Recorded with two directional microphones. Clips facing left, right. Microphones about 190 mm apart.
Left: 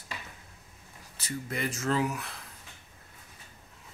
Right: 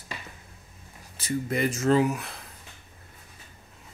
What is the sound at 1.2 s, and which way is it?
Speech, 20° right (ahead or behind).